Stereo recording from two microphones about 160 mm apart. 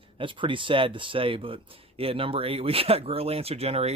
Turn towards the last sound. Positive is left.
turn(degrees=-40)  # may be behind; listen again after turning